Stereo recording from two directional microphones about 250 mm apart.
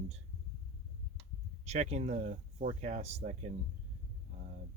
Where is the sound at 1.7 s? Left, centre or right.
Right.